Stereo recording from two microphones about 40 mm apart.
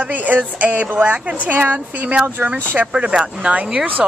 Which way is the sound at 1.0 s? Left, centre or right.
Right.